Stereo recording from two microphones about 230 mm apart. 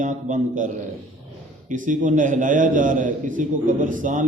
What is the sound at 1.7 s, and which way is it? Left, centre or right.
A man's voice, right.